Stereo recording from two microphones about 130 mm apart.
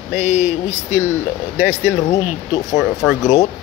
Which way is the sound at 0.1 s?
60° left (ahead or behind).